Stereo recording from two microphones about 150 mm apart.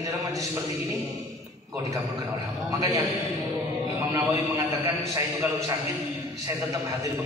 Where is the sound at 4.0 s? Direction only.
15° right (ahead or behind).